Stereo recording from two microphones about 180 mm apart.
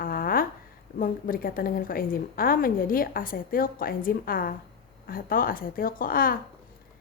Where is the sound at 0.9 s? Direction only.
50° left (ahead or behind).